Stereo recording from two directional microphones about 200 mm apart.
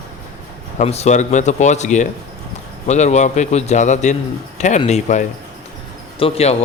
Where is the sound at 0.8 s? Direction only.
35° left (ahead or behind).